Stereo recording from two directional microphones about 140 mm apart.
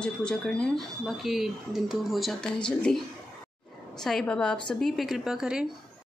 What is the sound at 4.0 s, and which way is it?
Speech, 5° left (ahead or behind).